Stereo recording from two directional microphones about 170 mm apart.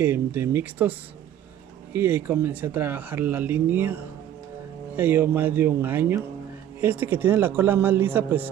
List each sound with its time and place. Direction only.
0.0 s speech: 15° right (ahead or behind)
2.0 s speech: 15° right (ahead or behind)